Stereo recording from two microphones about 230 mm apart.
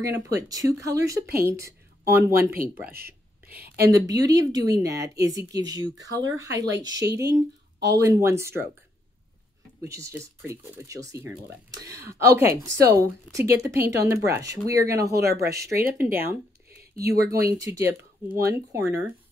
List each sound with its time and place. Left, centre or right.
0.0 s speech: centre
1.2 s speech: right
1.5 s speech: centre
3.5 s speech: right
3.9 s speech: centre
9.8 s speech: centre
15.1 s speech: right
16.0 s speech: centre